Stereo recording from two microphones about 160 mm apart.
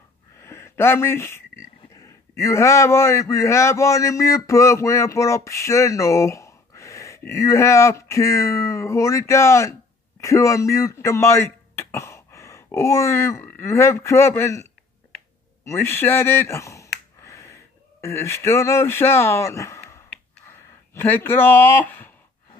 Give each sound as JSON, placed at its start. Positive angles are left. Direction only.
{"t": 0.4, "sound": "a man's voice", "side_deg": 15}
{"t": 16.9, "sound": "a sound", "side_deg": 15}
{"t": 18.0, "sound": "speech", "side_deg": 15}